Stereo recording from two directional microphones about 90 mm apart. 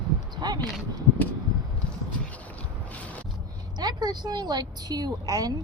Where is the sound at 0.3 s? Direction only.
50° right (ahead or behind).